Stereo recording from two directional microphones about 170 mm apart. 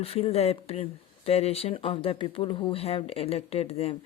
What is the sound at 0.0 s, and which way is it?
Speech, 35° left (ahead or behind).